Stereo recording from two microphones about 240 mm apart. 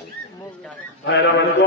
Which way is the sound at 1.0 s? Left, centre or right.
Left.